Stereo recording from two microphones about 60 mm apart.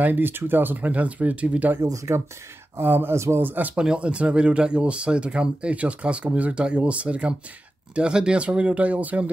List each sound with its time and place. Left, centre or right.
0.0 s speech: right
1.8 s speech: right
2.8 s speech: right
3.7 s speech: centre